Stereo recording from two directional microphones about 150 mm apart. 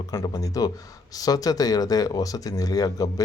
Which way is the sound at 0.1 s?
20° left (ahead or behind).